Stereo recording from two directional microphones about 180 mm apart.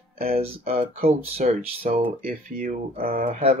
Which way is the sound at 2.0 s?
50° right (ahead or behind).